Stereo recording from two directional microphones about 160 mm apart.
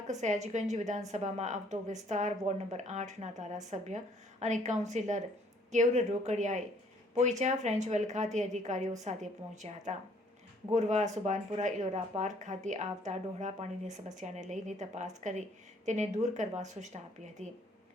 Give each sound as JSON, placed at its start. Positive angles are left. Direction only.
{"t": 0.1, "sound": "speech", "side_deg": -45}